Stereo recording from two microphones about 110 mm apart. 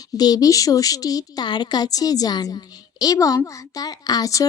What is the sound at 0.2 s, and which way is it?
Speech, 35° left (ahead or behind).